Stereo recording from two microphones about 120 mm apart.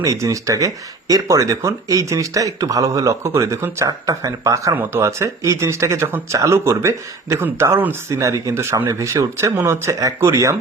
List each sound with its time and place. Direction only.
0.0 s speech: 30° right (ahead or behind)